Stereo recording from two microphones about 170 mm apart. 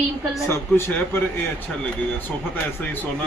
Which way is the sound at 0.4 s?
15° left (ahead or behind).